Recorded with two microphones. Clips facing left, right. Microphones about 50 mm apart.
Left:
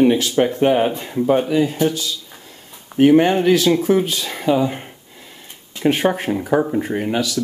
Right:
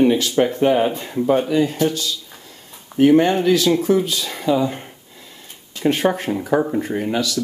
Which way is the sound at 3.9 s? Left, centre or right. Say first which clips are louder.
Left 1 dB; left.